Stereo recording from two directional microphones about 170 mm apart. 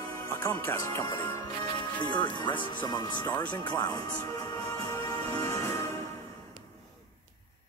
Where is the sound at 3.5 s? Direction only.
25° left (ahead or behind).